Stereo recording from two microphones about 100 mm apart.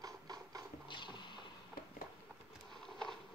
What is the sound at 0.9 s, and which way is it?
Vehicle, 55° left (ahead or behind).